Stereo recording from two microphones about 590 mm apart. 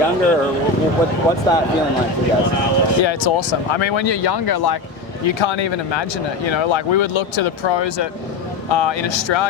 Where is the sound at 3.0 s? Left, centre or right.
Left.